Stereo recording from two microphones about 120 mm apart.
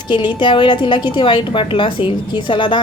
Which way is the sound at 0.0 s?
40° left (ahead or behind).